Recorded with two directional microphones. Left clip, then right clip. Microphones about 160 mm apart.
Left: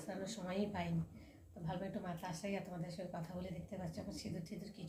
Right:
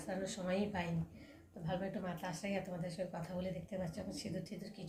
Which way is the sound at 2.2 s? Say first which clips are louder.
Right 3 dB; 10° right (ahead or behind).